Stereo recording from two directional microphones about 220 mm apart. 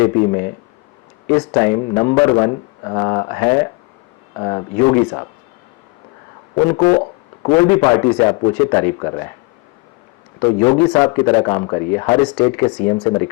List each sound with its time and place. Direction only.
1.3 s speech: 15° left (ahead or behind)
6.6 s speech: 15° left (ahead or behind)
10.4 s speech: 15° left (ahead or behind)